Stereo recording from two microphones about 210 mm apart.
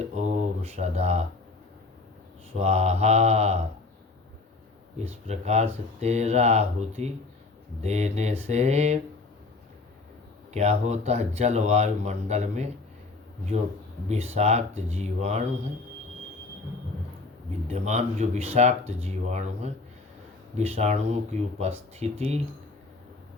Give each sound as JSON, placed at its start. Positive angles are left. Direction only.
{"t": 0.2, "sound": "speech", "side_deg": -30}
{"t": 2.6, "sound": "speech", "side_deg": -30}
{"t": 5.0, "sound": "speech", "side_deg": -30}
{"t": 10.5, "sound": "speech", "side_deg": -30}
{"t": 14.1, "sound": "speech", "side_deg": -30}
{"t": 17.7, "sound": "speech", "side_deg": -30}